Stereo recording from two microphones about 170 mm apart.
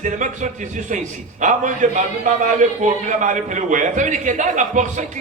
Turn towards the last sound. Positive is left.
turn(degrees=-45)  # may be behind; listen again after turning